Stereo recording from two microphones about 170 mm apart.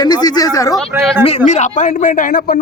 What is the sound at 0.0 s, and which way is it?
Speech, 25° left (ahead or behind).